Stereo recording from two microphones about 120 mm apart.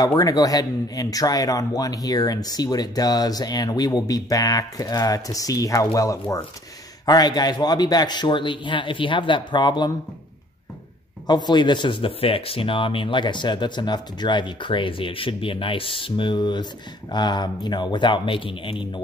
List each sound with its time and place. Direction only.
0.0 s speech: 30° left (ahead or behind)
11.2 s speech: 35° left (ahead or behind)